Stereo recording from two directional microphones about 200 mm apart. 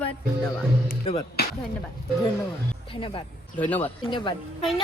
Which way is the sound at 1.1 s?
30° left (ahead or behind).